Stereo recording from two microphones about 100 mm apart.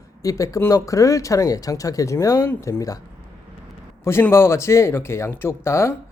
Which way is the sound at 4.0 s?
25° left (ahead or behind).